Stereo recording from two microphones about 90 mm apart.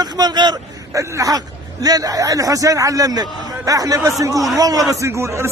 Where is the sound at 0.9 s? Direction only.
35° right (ahead or behind).